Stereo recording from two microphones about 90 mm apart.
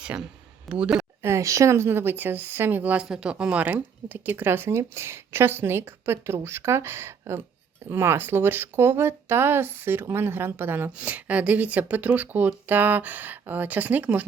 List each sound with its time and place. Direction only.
0.0 s speech: 10° right (ahead or behind)
1.2 s speech: 30° right (ahead or behind)